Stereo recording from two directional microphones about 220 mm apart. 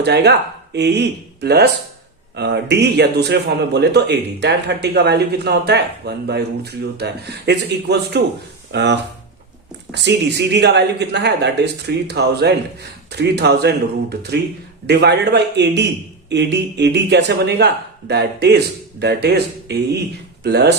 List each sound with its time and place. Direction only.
0.0 s a man's voice: 50° right (ahead or behind)